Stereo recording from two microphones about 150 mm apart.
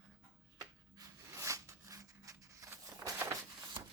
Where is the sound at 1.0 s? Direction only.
20° right (ahead or behind).